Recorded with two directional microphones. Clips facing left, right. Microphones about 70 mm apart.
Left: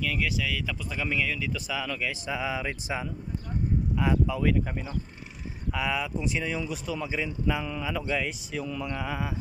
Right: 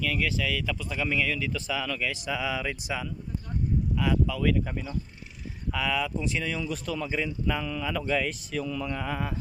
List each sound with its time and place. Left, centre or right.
0.0 s speech: centre